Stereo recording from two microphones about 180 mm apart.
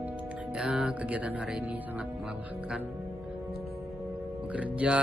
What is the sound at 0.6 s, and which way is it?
Music, 5° right (ahead or behind).